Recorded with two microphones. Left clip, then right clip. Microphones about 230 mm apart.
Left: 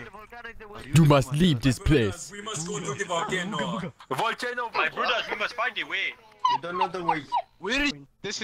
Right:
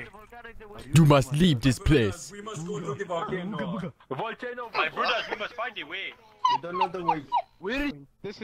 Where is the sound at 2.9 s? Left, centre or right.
Left.